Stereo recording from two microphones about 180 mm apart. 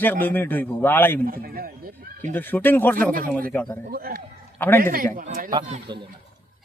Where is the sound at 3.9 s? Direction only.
55° right (ahead or behind).